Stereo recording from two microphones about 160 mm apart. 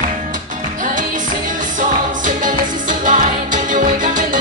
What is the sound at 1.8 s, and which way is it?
Music, 55° right (ahead or behind).